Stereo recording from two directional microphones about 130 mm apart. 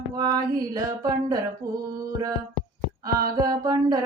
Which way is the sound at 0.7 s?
25° right (ahead or behind).